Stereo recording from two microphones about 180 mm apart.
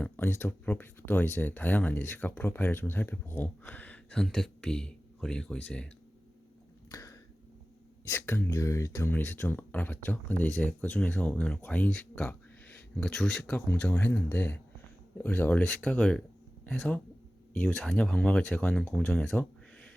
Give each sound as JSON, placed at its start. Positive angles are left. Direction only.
{"t": 0.0, "sound": "speech", "side_deg": 10}
{"t": 6.9, "sound": "a sound", "side_deg": 20}
{"t": 8.1, "sound": "speech", "side_deg": 15}